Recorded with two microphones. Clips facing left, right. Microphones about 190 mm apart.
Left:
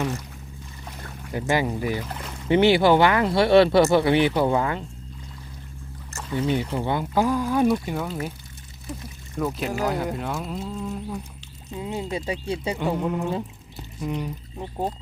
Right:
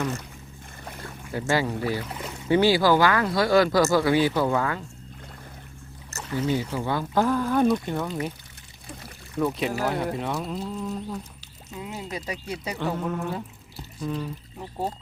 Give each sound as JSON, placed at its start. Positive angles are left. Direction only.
{"t": 1.3, "sound": "speech", "side_deg": 20}
{"t": 6.6, "sound": "speech", "side_deg": 25}
{"t": 9.4, "sound": "speech", "side_deg": 0}
{"t": 11.7, "sound": "speech", "side_deg": 25}
{"t": 12.8, "sound": "speech", "side_deg": 15}